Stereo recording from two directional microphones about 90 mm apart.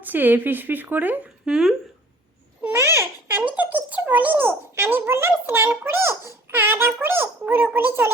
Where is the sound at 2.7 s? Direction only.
30° right (ahead or behind).